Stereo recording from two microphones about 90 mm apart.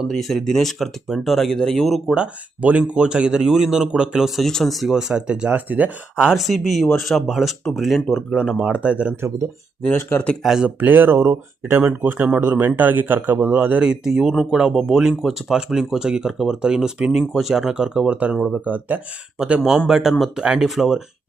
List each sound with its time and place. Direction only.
0.1 s speech: centre (ahead or behind)
2.1 s speech: 15° right (ahead or behind)
10.4 s speech: 5° right (ahead or behind)
10.8 s speech: 20° right (ahead or behind)
18.3 s speech: centre (ahead or behind)
18.6 s speech: 15° right (ahead or behind); by 21.0 s centre (ahead or behind)